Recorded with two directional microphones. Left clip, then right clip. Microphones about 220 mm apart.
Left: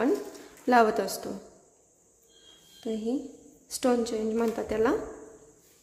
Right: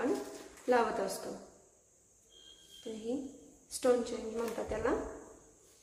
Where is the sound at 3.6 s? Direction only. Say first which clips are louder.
Left 4 dB; 40° left (ahead or behind).